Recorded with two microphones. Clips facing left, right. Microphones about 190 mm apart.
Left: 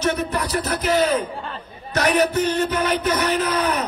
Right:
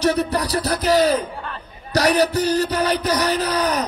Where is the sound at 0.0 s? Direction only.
35° right (ahead or behind).